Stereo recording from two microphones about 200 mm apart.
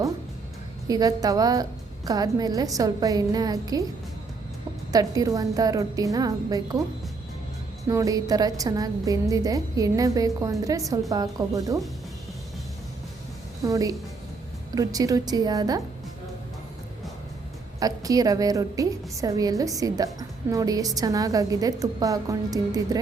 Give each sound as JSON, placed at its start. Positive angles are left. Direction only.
{"t": 0.9, "sound": "a woman's voice", "side_deg": -20}
{"t": 4.9, "sound": "a woman's voice", "side_deg": -20}
{"t": 7.9, "sound": "a woman's voice", "side_deg": -15}
{"t": 13.6, "sound": "a woman's voice", "side_deg": -15}
{"t": 17.7, "sound": "a woman's voice", "side_deg": -20}